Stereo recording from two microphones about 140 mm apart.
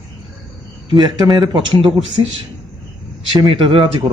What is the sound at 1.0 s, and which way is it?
Speech, 35° right (ahead or behind).